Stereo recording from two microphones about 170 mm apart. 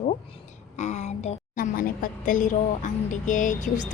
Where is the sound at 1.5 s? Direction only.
55° left (ahead or behind).